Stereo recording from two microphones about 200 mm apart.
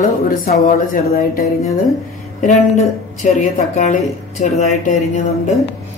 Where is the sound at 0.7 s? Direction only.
45° left (ahead or behind).